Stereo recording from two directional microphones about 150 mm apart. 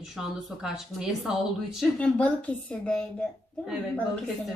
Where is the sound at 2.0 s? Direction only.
10° left (ahead or behind).